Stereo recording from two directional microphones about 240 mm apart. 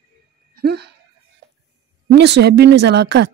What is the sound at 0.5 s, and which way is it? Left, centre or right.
Speech, right.